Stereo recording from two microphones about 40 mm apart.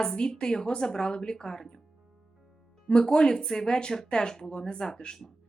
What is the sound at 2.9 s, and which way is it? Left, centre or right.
A woman's voice, centre.